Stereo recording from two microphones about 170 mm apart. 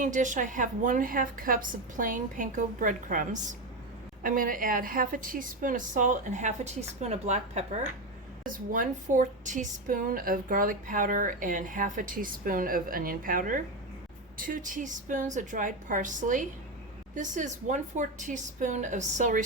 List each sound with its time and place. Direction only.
0.0 s speech: 50° right (ahead or behind)
8.4 s speech: 50° right (ahead or behind)